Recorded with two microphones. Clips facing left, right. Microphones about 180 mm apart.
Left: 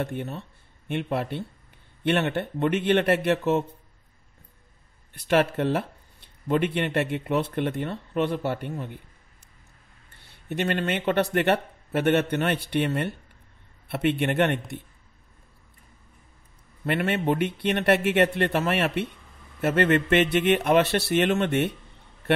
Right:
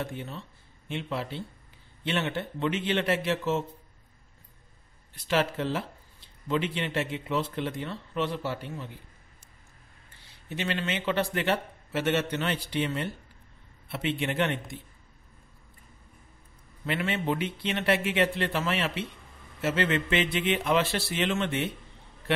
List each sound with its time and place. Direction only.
0.0 s speech: 55° left (ahead or behind)
5.1 s speech: 60° left (ahead or behind)
10.2 s speech: 60° left (ahead or behind)
16.8 s speech: 55° left (ahead or behind)